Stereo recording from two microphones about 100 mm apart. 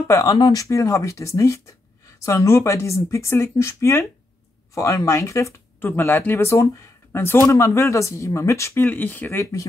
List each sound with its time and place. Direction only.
0.1 s speech: 35° left (ahead or behind)
9.4 s speech: 35° left (ahead or behind)